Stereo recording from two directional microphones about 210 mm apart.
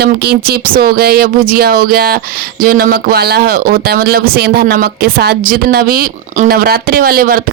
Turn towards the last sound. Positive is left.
turn(degrees=-45)  # may be behind; listen again after turning